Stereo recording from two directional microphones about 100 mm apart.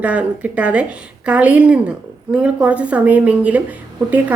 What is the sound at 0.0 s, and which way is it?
A woman's voice, 15° right (ahead or behind).